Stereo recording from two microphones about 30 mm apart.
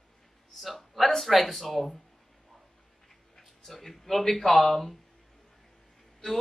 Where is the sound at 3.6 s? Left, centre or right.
Centre.